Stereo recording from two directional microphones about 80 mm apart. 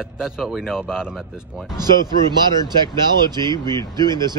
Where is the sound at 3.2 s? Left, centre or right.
Right.